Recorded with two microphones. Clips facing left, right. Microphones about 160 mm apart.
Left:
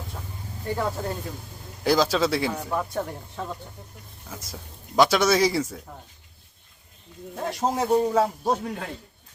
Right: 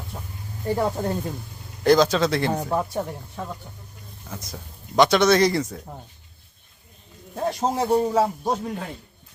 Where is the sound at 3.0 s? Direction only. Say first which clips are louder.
Right 1 dB; 15° right (ahead or behind).